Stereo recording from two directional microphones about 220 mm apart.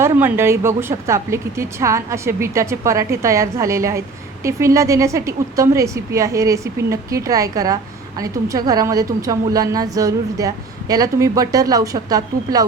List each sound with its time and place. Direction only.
0.0 s a woman's voice: 10° right (ahead or behind)